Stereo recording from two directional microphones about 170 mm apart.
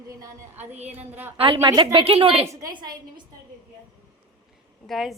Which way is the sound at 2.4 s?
25° right (ahead or behind).